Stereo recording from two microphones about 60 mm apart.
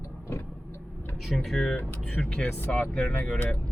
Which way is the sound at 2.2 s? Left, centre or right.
Centre.